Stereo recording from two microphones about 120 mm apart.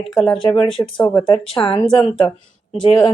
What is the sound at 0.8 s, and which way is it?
Speech, 20° left (ahead or behind).